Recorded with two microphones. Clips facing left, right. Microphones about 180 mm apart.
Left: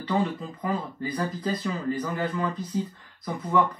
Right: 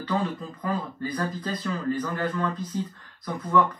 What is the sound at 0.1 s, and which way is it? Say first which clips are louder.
Speech: left 2 dB; 15° left (ahead or behind).